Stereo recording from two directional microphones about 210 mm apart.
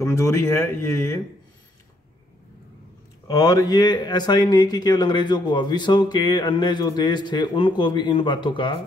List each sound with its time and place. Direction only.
0.0 s speech: 10° left (ahead or behind)
3.3 s speech: 15° left (ahead or behind)